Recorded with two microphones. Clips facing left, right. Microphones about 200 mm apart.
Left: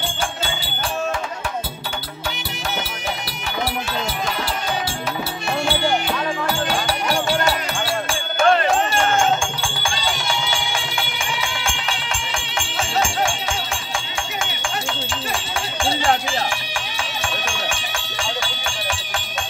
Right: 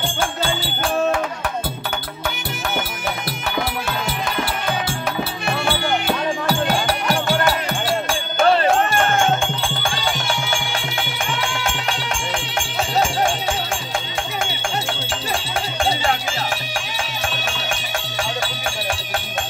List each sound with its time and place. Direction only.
8.4 s music: 55° right (ahead or behind)
11.7 s music: 45° right (ahead or behind)
15.8 s wind chime: 50° right (ahead or behind)